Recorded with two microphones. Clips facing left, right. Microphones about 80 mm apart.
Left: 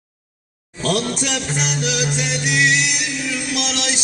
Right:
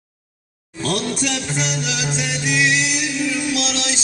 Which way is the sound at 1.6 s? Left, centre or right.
Left.